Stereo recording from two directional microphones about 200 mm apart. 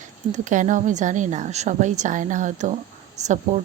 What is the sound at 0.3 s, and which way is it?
A woman's voice, 40° right (ahead or behind).